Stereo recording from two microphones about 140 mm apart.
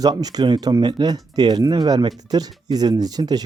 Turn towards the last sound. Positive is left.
turn(degrees=-30)  # may be behind; listen again after turning